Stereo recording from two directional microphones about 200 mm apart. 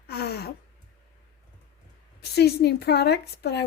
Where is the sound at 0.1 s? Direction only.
50° left (ahead or behind).